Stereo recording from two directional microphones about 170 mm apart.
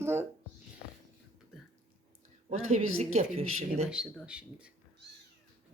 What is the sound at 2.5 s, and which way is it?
Speech, 40° right (ahead or behind).